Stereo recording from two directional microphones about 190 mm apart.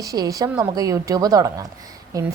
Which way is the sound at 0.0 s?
20° right (ahead or behind).